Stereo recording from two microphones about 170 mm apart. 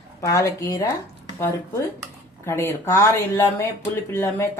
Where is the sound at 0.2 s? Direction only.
20° left (ahead or behind).